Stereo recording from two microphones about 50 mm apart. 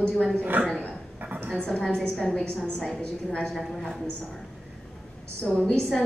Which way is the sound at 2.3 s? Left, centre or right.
Left.